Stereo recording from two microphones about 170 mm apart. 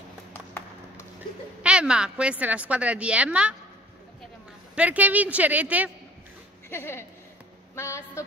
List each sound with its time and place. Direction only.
0.3 s a sound: 10° left (ahead or behind)
1.6 s a woman's voice: 5° right (ahead or behind)
4.7 s a woman's voice: 10° right (ahead or behind)
6.7 s a woman's voice: 15° left (ahead or behind)